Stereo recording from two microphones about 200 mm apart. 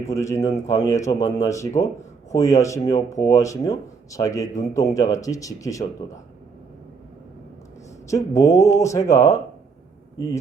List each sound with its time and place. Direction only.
0.0 s speech: 15° left (ahead or behind)
8.0 s speech: 15° left (ahead or behind)